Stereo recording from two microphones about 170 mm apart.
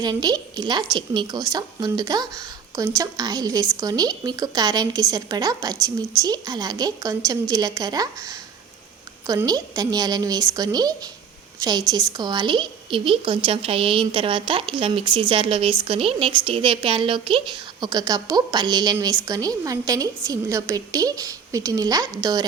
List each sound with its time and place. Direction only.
0.0 s a woman's voice: 25° right (ahead or behind)